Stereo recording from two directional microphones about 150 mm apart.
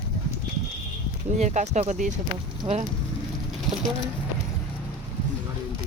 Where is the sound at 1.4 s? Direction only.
50° right (ahead or behind).